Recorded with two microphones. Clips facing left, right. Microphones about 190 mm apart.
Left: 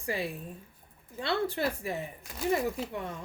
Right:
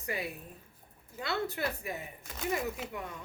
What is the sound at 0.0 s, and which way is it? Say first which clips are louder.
Speech: left 4 dB; 30° left (ahead or behind).